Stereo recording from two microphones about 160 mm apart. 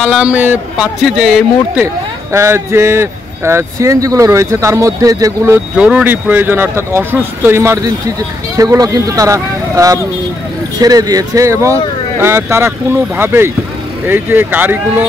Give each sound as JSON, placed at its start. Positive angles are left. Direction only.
{"t": 0.0, "sound": "speech", "side_deg": -5}
{"t": 2.3, "sound": "speech", "side_deg": -15}
{"t": 5.8, "sound": "speech", "side_deg": -5}